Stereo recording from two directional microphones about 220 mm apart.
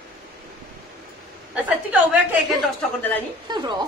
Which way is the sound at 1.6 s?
5° right (ahead or behind).